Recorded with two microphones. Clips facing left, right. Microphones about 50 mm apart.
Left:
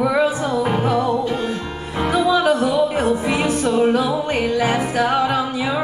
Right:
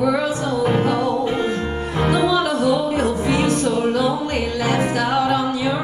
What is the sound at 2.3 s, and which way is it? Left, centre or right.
Music, left.